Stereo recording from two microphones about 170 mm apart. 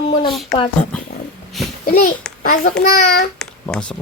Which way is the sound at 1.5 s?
Centre (ahead or behind).